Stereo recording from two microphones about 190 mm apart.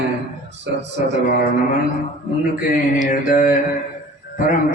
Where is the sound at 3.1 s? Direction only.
45° left (ahead or behind).